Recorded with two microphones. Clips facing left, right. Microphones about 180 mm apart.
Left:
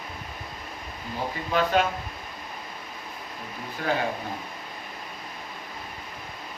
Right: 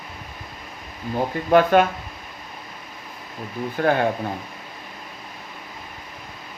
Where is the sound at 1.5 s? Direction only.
55° right (ahead or behind).